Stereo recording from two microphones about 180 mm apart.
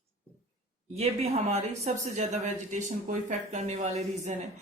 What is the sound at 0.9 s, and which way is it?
Speech, 35° right (ahead or behind).